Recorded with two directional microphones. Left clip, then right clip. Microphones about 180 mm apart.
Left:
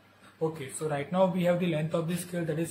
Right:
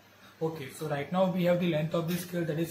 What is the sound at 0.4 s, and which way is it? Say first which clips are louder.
A man's voice: left 2 dB; 20° left (ahead or behind).